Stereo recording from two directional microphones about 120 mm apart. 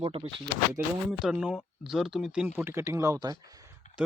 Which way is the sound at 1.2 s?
10° right (ahead or behind).